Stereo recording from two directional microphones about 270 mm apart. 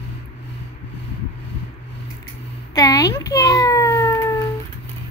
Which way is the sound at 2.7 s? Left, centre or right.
Centre.